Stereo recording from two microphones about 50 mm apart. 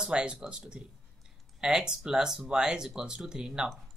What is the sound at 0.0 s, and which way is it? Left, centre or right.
A man's voice, centre.